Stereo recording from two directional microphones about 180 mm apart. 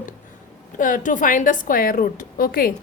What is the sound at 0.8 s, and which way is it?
A woman's voice, 45° left (ahead or behind).